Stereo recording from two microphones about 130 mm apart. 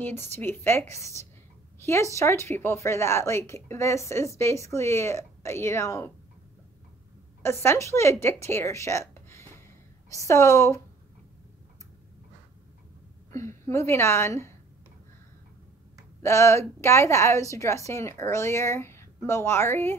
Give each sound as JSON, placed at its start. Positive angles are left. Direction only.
{"t": 0.0, "sound": "speech", "side_deg": 15}
{"t": 7.4, "sound": "speech", "side_deg": 20}
{"t": 13.3, "sound": "a woman's voice", "side_deg": 20}
{"t": 16.2, "sound": "speech", "side_deg": 20}